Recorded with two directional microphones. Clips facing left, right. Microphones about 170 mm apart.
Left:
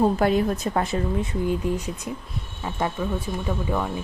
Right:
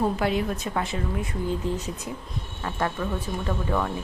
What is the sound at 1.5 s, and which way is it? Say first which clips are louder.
Speech: left 3 dB; 15° left (ahead or behind).